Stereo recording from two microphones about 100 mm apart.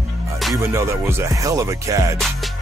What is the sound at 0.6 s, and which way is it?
Speech, 25° right (ahead or behind).